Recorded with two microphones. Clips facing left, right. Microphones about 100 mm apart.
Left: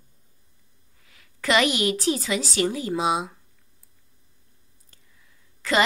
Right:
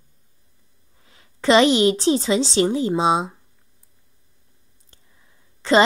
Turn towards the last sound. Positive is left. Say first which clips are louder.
# right 7 dB
turn(degrees=-30)  # may be behind; listen again after turning